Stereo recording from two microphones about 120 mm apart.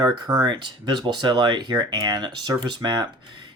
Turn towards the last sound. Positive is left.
turn(degrees=-40)  # may be behind; listen again after turning